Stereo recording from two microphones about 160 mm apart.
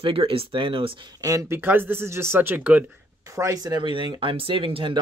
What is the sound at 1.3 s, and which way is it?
Speech, 15° right (ahead or behind).